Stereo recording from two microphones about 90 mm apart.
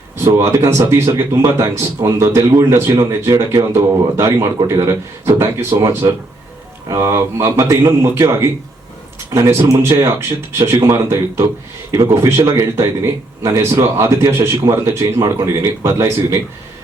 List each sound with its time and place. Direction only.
0.3 s speech: 30° right (ahead or behind)